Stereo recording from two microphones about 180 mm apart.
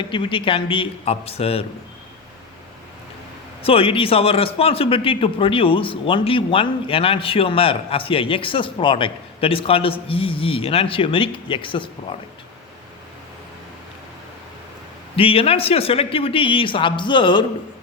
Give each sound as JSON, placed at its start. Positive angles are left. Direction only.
{"t": 0.0, "sound": "a man's voice", "side_deg": 30}
{"t": 3.7, "sound": "a man's voice", "side_deg": 30}
{"t": 15.1, "sound": "speech", "side_deg": 30}